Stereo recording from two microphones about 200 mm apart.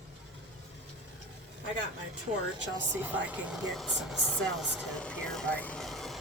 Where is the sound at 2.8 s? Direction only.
10° right (ahead or behind).